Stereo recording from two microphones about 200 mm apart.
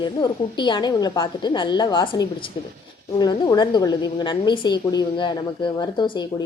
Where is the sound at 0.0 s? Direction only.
25° left (ahead or behind).